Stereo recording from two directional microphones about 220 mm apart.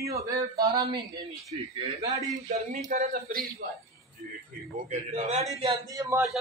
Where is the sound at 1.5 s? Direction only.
25° right (ahead or behind).